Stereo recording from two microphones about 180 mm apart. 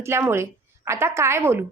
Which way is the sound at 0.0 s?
15° right (ahead or behind).